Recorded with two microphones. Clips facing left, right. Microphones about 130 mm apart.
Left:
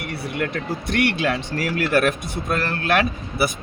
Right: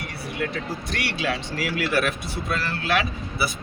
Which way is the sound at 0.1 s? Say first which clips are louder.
Left 4 dB; 60° left (ahead or behind).